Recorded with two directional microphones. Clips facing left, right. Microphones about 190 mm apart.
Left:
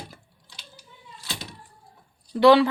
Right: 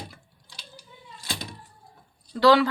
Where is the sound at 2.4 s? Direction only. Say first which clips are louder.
Left 3 dB; 25° left (ahead or behind).